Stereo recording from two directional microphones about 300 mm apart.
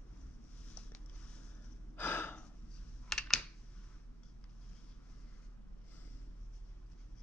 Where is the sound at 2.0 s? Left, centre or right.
Centre.